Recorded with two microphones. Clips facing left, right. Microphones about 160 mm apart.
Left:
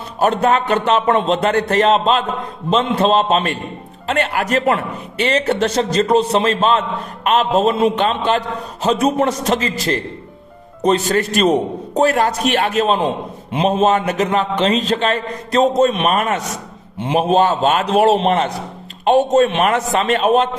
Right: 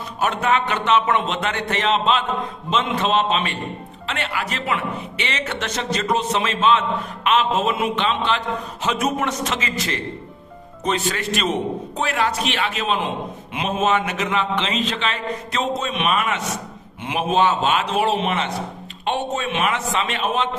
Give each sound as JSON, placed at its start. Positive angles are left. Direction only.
{"t": 0.2, "sound": "a man's voice", "side_deg": 35}